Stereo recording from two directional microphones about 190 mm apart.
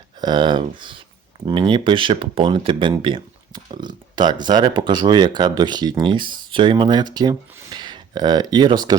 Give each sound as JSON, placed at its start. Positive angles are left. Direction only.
{"t": 0.2, "sound": "speech", "side_deg": -25}